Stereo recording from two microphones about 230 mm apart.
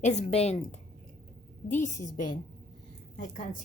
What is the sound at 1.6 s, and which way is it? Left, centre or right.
Speech, left.